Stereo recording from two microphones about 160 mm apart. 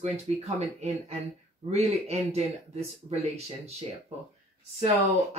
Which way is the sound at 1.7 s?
40° right (ahead or behind).